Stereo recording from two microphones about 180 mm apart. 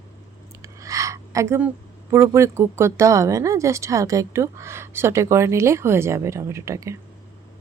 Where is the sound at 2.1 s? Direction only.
15° right (ahead or behind).